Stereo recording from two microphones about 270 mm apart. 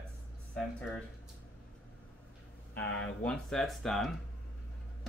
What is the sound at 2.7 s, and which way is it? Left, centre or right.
Speech, centre.